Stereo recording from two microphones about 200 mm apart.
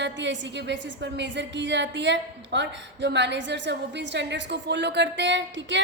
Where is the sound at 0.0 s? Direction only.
65° right (ahead or behind).